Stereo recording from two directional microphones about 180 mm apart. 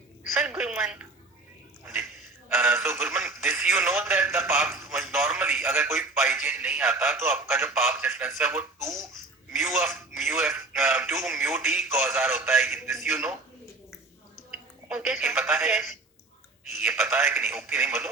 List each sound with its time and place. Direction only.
0.3 s speech: 5° right (ahead or behind)
14.5 s a sound: 5° right (ahead or behind)
15.4 s speech: centre (ahead or behind)